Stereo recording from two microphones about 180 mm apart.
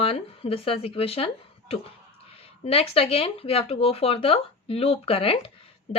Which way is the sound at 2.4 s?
35° left (ahead or behind).